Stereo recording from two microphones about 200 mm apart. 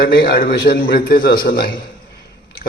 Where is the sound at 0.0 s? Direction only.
50° left (ahead or behind).